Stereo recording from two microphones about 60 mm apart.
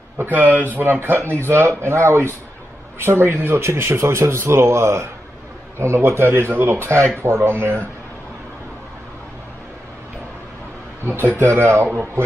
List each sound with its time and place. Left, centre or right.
0.2 s speech: right
11.1 s speech: right